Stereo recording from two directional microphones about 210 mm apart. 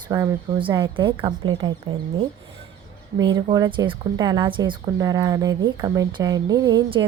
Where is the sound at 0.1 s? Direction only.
15° right (ahead or behind).